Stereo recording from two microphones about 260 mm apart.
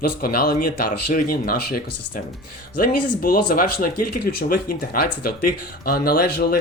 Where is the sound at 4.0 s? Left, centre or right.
Left.